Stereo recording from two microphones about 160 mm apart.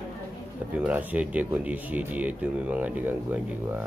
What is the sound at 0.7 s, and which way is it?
Speech, 10° right (ahead or behind).